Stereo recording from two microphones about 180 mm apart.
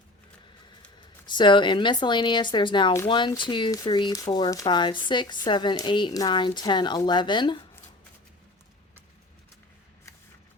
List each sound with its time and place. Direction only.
1.3 s a woman's voice: 25° left (ahead or behind)